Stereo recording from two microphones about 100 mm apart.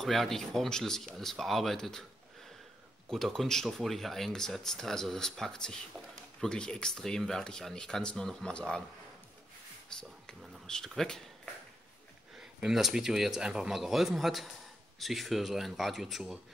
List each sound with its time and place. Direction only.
0.0 s speech: centre (ahead or behind)
3.1 s speech: 5° left (ahead or behind)
9.9 s speech: 5° left (ahead or behind)
12.4 s speech: 5° right (ahead or behind)